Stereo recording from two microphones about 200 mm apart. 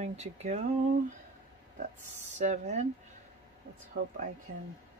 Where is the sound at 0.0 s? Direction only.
35° right (ahead or behind).